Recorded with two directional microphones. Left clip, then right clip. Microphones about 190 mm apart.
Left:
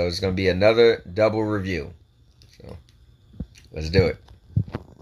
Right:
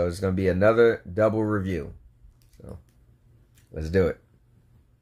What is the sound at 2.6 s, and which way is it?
Speech, 10° left (ahead or behind).